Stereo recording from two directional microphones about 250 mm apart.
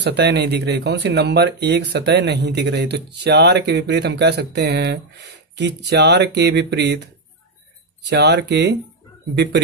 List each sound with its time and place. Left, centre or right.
0.0 s speech: right
8.1 s speech: right